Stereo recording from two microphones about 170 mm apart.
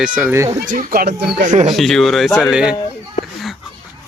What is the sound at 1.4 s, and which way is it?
Speech, 45° right (ahead or behind).